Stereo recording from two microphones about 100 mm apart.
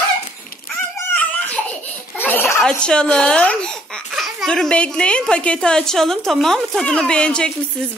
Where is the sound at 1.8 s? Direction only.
20° left (ahead or behind).